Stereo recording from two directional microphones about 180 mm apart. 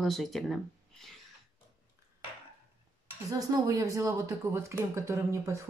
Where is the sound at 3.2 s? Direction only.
20° right (ahead or behind).